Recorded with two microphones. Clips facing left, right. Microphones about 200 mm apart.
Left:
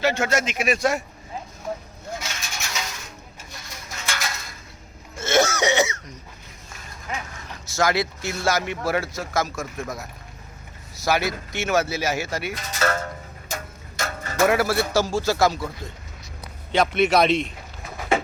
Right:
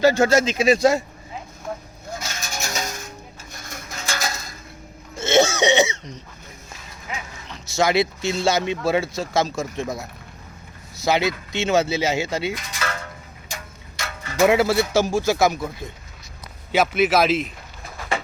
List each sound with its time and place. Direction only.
0.0 s speech: 35° right (ahead or behind)
2.2 s music: 45° right (ahead or behind)
3.5 s a sound: 50° right (ahead or behind)
5.2 s throat clearing: 25° right (ahead or behind)
7.8 s speech: 25° right (ahead or behind)
12.7 s a sound: 40° left (ahead or behind)
14.4 s speech: 20° right (ahead or behind)
16.7 s a man's voice: 5° right (ahead or behind)